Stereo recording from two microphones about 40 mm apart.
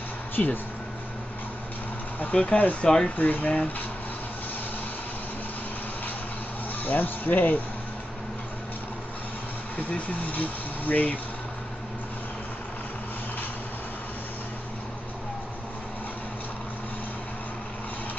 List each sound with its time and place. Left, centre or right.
2.3 s speech: left
2.8 s speech: centre
3.2 s speech: left
3.4 s speech: left
6.8 s speech: left
9.8 s speech: left